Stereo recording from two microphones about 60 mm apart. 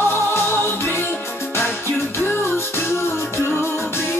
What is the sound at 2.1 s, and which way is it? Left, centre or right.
Music, left.